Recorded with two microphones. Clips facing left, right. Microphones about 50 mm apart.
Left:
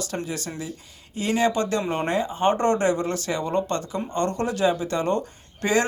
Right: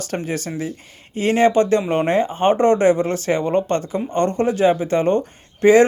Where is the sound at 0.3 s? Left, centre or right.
Right.